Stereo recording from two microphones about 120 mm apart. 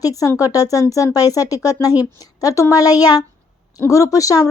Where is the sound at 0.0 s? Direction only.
30° left (ahead or behind).